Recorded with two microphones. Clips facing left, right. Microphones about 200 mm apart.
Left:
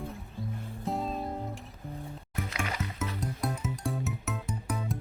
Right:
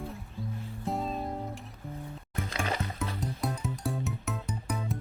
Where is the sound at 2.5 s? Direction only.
35° right (ahead or behind).